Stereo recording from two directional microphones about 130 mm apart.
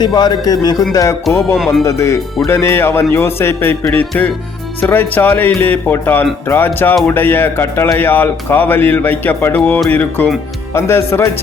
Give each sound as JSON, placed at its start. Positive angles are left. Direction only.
{"t": 0.0, "sound": "a man's voice", "side_deg": 30}
{"t": 1.4, "sound": "speech", "side_deg": 0}
{"t": 1.8, "sound": "a man's voice", "side_deg": 25}